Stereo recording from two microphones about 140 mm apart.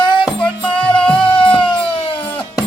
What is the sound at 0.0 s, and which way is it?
Music, 35° left (ahead or behind).